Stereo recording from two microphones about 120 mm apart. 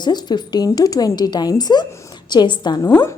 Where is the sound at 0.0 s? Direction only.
35° left (ahead or behind).